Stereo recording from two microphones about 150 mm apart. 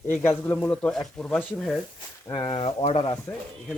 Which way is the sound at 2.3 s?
30° left (ahead or behind).